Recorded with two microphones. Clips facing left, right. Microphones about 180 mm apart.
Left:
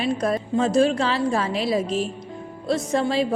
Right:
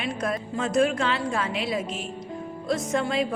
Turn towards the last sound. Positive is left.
turn(degrees=35)  # may be behind; listen again after turning